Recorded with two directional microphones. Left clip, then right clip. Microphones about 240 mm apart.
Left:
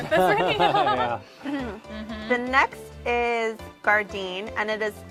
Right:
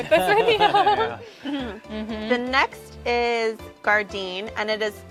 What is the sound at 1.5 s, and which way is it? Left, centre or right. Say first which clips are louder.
Speech: right 1 dB; centre.